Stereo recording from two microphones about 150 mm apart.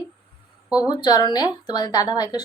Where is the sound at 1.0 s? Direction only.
30° left (ahead or behind).